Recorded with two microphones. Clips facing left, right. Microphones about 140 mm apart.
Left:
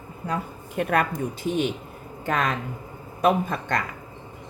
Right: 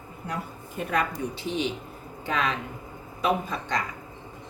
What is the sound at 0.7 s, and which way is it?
Speech, 55° left (ahead or behind).